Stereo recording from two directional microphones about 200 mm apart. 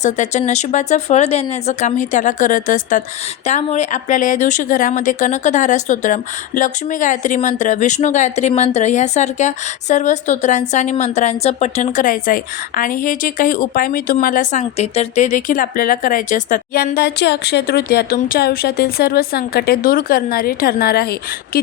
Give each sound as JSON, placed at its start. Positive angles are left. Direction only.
{"t": 0.0, "sound": "a woman's voice", "side_deg": 35}